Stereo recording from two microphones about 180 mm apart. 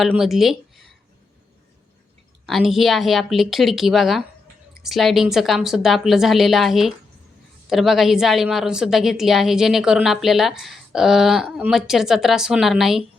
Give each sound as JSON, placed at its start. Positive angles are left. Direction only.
{"t": 0.0, "sound": "speech", "side_deg": 0}
{"t": 2.5, "sound": "a woman's voice", "side_deg": 0}